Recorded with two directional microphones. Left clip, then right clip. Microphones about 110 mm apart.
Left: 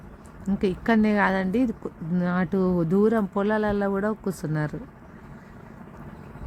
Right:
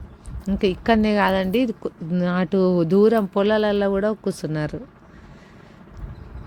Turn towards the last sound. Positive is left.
turn(degrees=-40)  # may be behind; listen again after turning